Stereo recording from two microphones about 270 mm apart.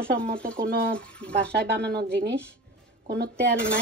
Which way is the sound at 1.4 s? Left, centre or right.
Right.